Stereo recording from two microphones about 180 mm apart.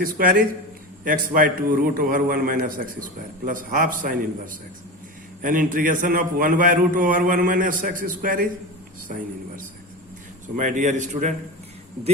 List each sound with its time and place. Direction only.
0.0 s a man's voice: 50° right (ahead or behind)
5.4 s a man's voice: 50° right (ahead or behind)
10.6 s a man's voice: 45° right (ahead or behind)